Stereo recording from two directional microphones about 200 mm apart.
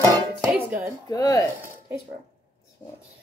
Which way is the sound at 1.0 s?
15° left (ahead or behind).